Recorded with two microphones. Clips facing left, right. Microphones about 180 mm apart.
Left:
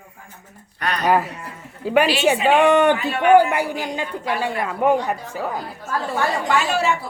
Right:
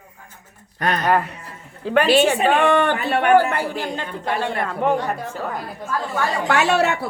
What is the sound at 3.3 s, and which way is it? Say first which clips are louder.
A man's voice: left 3 dB; 15° left (ahead or behind).